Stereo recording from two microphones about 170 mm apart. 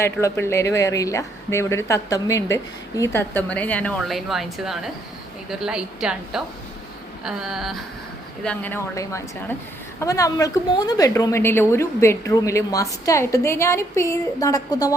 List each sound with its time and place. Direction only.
0.0 s a woman's voice: 15° left (ahead or behind); by 7.9 s centre (ahead or behind)
8.4 s a woman's voice: 10° left (ahead or behind)